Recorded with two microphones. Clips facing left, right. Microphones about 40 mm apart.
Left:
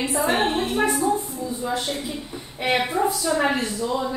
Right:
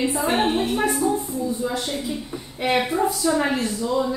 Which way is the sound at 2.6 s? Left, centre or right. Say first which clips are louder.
Right 1 dB; centre.